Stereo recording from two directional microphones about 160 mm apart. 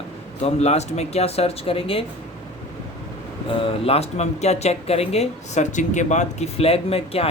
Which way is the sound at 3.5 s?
35° left (ahead or behind).